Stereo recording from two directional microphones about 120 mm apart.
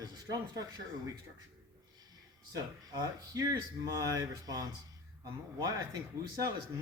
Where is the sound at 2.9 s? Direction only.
35° right (ahead or behind).